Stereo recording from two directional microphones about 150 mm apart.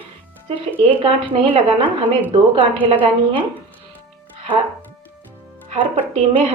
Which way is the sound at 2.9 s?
35° right (ahead or behind).